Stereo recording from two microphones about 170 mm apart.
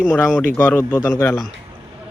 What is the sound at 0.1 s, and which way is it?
Speech, 10° left (ahead or behind).